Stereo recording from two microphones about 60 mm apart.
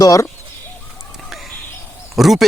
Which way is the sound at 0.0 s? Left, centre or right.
Left.